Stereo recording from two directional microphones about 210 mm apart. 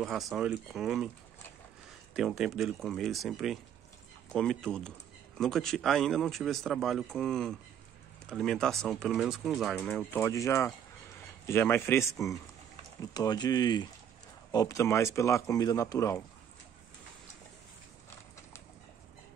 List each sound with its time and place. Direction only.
0.0 s speech: centre (ahead or behind)
2.1 s speech: centre (ahead or behind); by 16.2 s 15° left (ahead or behind)